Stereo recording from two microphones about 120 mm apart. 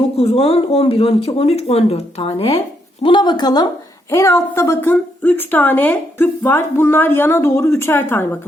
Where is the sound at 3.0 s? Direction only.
40° left (ahead or behind).